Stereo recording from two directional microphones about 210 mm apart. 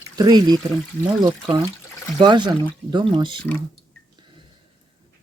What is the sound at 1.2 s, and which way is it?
Speech, 20° right (ahead or behind).